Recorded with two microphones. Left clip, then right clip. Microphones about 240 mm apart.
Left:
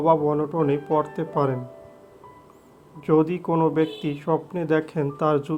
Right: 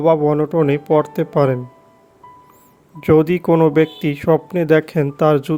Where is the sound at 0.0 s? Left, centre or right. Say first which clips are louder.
Right 6 dB; right.